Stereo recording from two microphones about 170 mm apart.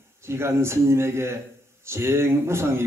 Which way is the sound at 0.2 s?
15° right (ahead or behind).